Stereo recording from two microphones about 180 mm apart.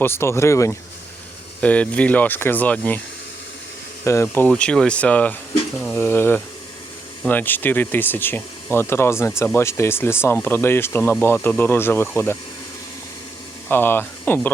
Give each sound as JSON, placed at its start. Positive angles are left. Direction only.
{"t": 0.0, "sound": "speech", "side_deg": 15}
{"t": 4.0, "sound": "speech", "side_deg": 15}
{"t": 13.7, "sound": "speech", "side_deg": 10}